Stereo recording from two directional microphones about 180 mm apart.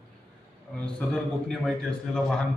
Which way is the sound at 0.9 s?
5° left (ahead or behind).